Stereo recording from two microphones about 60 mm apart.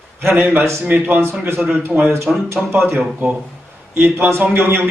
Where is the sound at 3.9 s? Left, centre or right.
Right.